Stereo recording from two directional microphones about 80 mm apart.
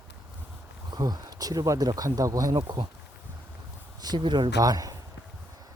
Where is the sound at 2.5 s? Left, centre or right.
Right.